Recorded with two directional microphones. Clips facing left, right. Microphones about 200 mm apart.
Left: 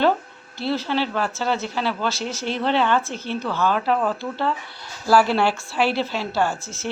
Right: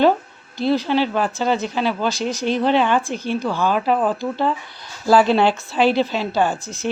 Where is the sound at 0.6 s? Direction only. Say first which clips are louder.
Right 5 dB; 15° right (ahead or behind).